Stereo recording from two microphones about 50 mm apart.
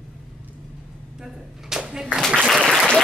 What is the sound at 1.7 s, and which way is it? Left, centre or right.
Clapping, centre.